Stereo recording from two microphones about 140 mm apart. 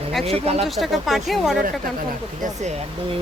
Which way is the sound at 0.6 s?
Centre (ahead or behind).